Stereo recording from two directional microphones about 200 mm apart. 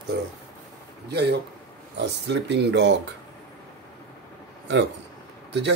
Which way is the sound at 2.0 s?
60° right (ahead or behind).